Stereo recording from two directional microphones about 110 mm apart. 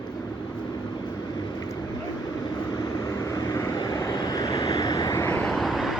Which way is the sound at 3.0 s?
35° left (ahead or behind).